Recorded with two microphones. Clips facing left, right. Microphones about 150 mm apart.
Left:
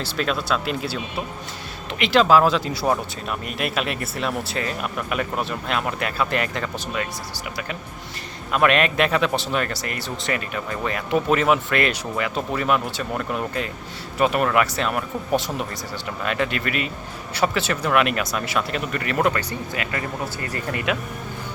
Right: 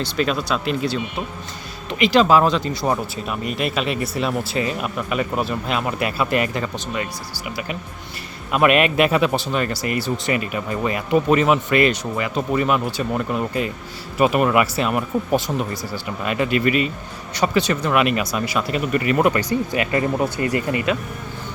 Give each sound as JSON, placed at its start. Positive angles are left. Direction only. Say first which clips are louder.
{"t": 0.0, "sound": "speech", "louder": "right 3 dB", "side_deg": 0}
{"t": 20.7, "sound": "speech", "louder": "right 3 dB", "side_deg": 5}